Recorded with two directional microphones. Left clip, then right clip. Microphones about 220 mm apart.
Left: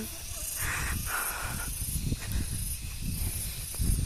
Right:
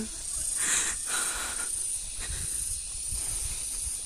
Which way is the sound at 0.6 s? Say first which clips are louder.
Right 3 dB; 35° right (ahead or behind).